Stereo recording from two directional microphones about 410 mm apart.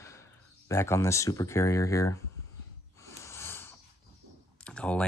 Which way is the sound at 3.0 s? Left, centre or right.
Centre.